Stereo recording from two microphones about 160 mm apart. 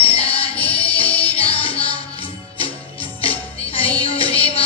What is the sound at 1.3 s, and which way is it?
Music, 35° left (ahead or behind).